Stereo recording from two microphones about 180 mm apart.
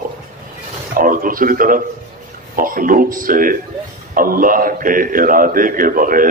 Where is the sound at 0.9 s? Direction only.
50° right (ahead or behind).